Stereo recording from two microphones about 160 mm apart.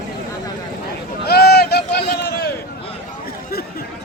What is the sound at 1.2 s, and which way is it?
Run, 90° left.